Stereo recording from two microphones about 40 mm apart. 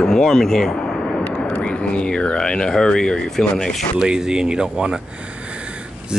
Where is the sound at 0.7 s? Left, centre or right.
Centre.